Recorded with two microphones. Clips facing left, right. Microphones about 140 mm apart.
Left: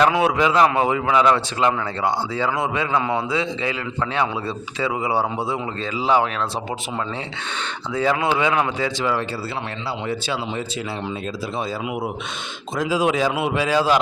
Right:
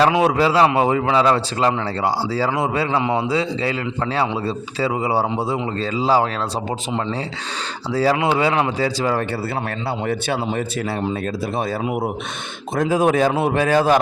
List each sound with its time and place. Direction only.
0.0 s a man's voice: 30° right (ahead or behind)
3.2 s a man's voice: 35° right (ahead or behind)
7.9 s a man's voice: 35° right (ahead or behind)
12.7 s speech: 55° right (ahead or behind)